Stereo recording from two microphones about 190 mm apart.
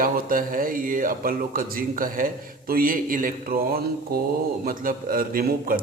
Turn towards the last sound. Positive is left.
turn(degrees=-50)  # may be behind; listen again after turning